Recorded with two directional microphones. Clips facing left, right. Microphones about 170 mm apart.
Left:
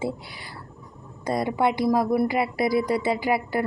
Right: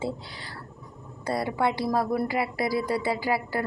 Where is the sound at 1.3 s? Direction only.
20° left (ahead or behind).